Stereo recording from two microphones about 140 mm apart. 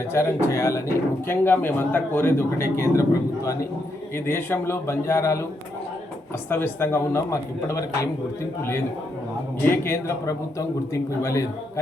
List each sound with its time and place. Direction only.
0.1 s speech: 20° left (ahead or behind)
6.5 s speech: 15° left (ahead or behind)
9.6 s speech: 15° left (ahead or behind)